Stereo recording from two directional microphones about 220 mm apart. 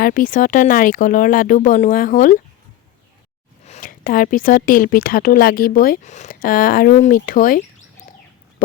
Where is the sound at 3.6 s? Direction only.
35° left (ahead or behind).